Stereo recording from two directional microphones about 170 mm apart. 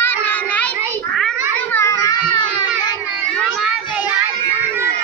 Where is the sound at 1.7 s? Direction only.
15° left (ahead or behind).